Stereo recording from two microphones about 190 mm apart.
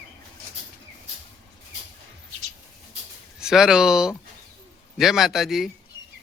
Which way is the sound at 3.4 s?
5° right (ahead or behind).